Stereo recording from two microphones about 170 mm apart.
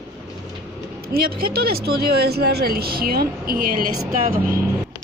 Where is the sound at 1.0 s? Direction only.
65° right (ahead or behind).